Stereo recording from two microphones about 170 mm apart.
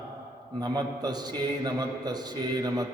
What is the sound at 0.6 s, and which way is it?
A man's voice, 25° right (ahead or behind).